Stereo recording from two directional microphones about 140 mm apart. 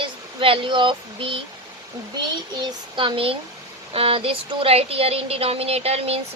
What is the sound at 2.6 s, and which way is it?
Speech, 35° right (ahead or behind).